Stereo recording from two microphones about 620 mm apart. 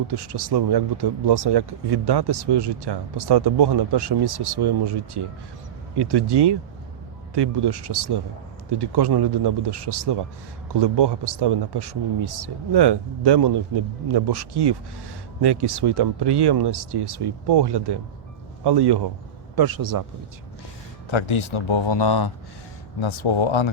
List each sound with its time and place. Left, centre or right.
0.1 s speech: right
21.1 s speech: left